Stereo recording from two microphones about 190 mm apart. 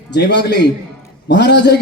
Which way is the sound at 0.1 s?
60° left (ahead or behind).